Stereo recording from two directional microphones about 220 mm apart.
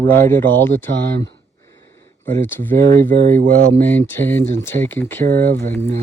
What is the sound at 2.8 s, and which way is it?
Speech, 45° right (ahead or behind).